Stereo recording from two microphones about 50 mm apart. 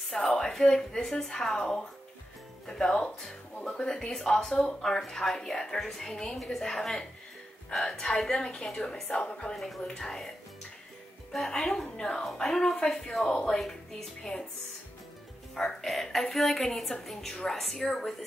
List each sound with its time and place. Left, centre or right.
0.0 s a sound: centre
0.3 s speech: centre
11.3 s speech: centre
15.5 s speech: centre